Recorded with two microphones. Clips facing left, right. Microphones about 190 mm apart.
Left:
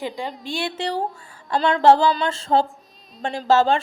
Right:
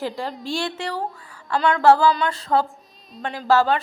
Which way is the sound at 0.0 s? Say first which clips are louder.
Right 1 dB; centre (ahead or behind).